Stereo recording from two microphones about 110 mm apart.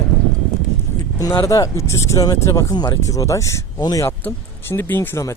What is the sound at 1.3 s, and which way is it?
Speech, 30° left (ahead or behind).